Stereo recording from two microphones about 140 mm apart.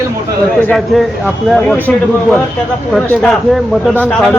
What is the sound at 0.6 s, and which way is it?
Speech, 10° left (ahead or behind).